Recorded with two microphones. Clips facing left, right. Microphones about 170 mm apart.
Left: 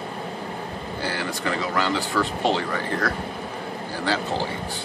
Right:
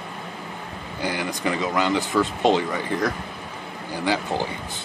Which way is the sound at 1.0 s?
15° right (ahead or behind).